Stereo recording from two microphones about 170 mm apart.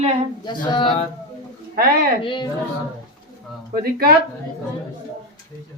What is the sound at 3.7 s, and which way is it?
Speech, 65° right (ahead or behind).